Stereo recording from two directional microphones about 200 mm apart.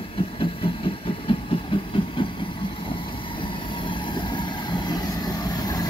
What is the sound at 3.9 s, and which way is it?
Vehicle, 25° left (ahead or behind).